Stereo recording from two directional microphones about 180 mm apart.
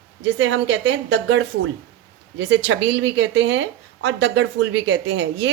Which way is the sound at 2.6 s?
90° right.